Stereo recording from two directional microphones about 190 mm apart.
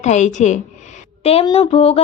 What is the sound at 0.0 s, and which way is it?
A woman's voice, 35° left (ahead or behind).